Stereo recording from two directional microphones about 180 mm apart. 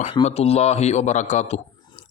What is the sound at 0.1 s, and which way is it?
Speech, 35° left (ahead or behind).